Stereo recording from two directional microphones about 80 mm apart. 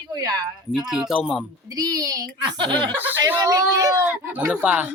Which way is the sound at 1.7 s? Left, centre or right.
Right.